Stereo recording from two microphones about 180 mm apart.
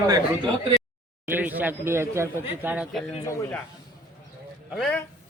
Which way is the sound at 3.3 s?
15° left (ahead or behind).